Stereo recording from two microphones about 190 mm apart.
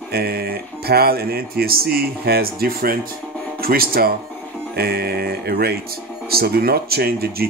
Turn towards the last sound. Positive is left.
turn(degrees=-55)  # may be behind; listen again after turning